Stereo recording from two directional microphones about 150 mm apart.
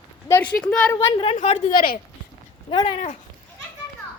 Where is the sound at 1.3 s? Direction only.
45° left (ahead or behind).